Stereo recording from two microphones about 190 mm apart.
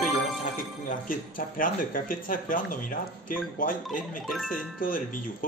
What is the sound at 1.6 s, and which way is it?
Speech, 45° left (ahead or behind).